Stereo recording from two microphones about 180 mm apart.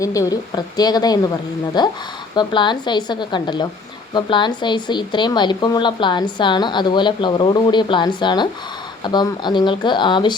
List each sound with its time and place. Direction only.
0.0 s speech: 20° left (ahead or behind)